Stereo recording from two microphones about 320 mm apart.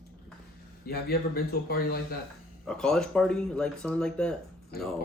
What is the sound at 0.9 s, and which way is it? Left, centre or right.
Speech, left.